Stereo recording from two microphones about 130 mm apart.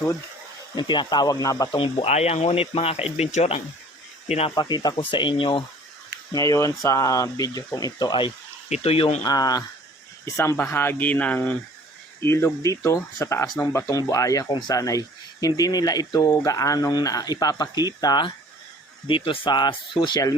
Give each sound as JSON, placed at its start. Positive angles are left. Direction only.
{"t": 0.8, "sound": "speech", "side_deg": 35}
{"t": 1.7, "sound": "speech", "side_deg": 40}
{"t": 2.0, "sound": "speech", "side_deg": 55}
{"t": 4.5, "sound": "speech", "side_deg": 30}
{"t": 6.3, "sound": "speech", "side_deg": 25}
{"t": 8.7, "sound": "speech", "side_deg": 50}
{"t": 9.2, "sound": "speech", "side_deg": 30}
{"t": 13.9, "sound": "speech", "side_deg": 25}